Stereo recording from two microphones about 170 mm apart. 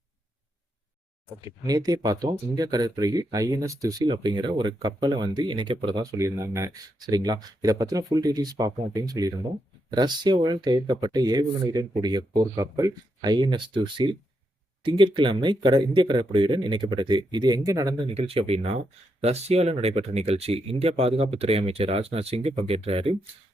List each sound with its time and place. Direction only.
1.3 s speech: 20° right (ahead or behind)
18.1 s speech: 35° right (ahead or behind)